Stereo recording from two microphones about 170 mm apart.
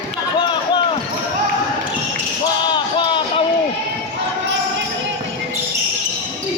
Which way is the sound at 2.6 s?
25° left (ahead or behind).